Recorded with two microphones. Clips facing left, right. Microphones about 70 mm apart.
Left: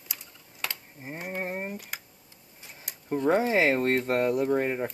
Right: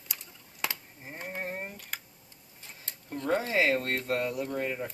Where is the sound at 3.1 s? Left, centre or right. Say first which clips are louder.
Left 6 dB; left.